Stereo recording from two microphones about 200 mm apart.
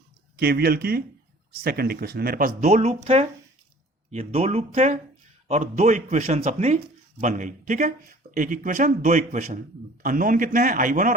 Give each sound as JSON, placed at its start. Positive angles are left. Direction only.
{"t": 0.3, "sound": "speech", "side_deg": -50}